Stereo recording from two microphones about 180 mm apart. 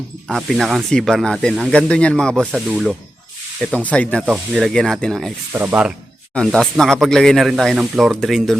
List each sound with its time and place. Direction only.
0.3 s speech: centre (ahead or behind)
4.3 s speech: 5° right (ahead or behind)
5.5 s speech: 10° right (ahead or behind)
6.3 s speech: 5° left (ahead or behind)